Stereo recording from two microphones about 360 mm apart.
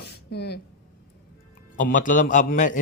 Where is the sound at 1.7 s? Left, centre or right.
Left.